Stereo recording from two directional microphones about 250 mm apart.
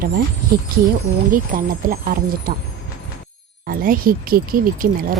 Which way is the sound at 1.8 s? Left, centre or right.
Right.